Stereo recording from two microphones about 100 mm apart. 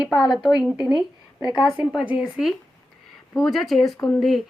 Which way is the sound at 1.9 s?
10° right (ahead or behind).